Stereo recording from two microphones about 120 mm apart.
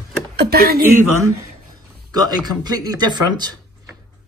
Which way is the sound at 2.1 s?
35° right (ahead or behind).